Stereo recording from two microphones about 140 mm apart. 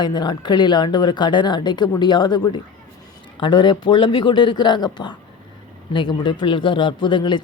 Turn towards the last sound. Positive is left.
turn(degrees=35)  # may be behind; listen again after turning